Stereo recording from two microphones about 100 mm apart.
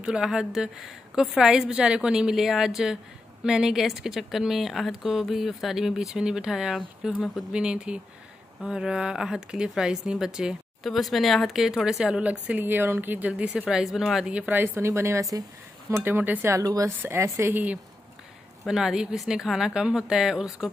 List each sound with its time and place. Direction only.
0.0 s a woman's voice: 10° right (ahead or behind)
14.3 s a woman's voice: 15° right (ahead or behind)
16.5 s a woman's voice: 35° right (ahead or behind)
18.7 s a woman's voice: 5° right (ahead or behind)